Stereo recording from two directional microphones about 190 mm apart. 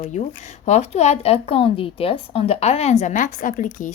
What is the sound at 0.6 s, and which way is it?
A woman's voice, 35° left (ahead or behind).